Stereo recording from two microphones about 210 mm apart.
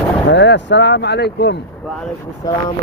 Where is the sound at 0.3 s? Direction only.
55° left (ahead or behind).